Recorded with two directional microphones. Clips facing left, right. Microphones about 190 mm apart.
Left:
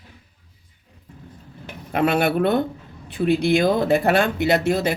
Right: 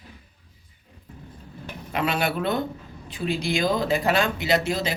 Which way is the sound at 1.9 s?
55° left (ahead or behind).